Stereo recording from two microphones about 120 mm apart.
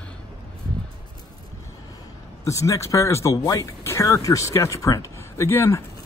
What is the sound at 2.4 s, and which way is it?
Speech, 25° left (ahead or behind).